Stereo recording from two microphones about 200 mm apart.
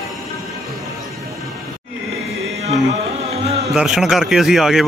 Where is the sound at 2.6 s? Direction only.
35° right (ahead or behind).